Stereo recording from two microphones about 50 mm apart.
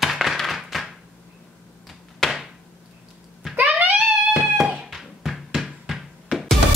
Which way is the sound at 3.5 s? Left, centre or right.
Right.